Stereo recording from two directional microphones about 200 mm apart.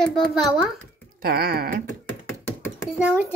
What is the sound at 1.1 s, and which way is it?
Speech, 50° right (ahead or behind).